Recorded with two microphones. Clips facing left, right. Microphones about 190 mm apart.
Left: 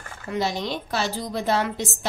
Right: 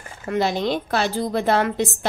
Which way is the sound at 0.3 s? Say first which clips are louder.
Right 5 dB; 55° right (ahead or behind).